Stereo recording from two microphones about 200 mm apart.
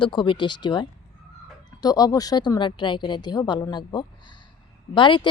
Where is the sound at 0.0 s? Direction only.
25° left (ahead or behind).